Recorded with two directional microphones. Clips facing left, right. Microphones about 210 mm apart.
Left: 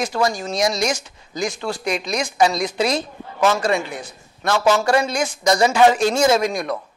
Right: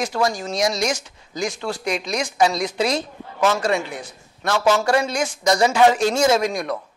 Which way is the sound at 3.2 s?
25° left (ahead or behind).